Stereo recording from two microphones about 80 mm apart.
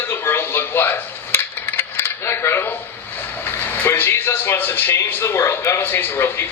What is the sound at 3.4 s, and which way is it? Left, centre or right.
A man's voice, left.